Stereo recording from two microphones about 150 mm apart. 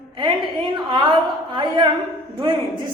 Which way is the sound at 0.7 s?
30° right (ahead or behind).